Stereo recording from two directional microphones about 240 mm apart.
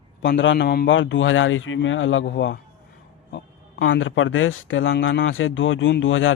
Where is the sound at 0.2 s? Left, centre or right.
Left.